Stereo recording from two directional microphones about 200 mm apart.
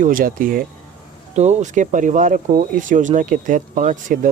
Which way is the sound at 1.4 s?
35° right (ahead or behind).